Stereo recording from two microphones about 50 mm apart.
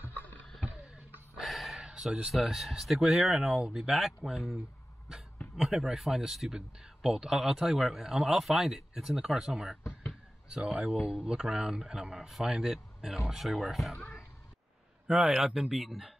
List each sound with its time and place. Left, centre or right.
1.4 s a sound: centre
1.8 s a sound: centre
2.3 s speech: centre
5.6 s speech: centre
10.6 s speech: right; by 12.4 s centre
12.4 s a sound: centre
13.4 s speech: centre
15.0 s speech: centre
15.7 s speech: centre